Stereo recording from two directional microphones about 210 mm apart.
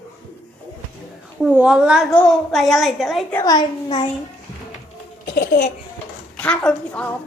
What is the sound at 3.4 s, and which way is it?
Speech, 20° left (ahead or behind).